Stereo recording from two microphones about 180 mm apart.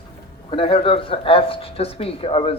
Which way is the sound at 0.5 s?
30° left (ahead or behind).